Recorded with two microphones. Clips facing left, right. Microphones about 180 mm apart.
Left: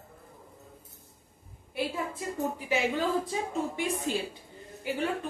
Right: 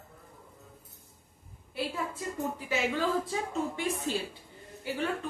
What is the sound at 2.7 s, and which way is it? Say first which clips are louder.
Speech: left 2 dB; 15° left (ahead or behind).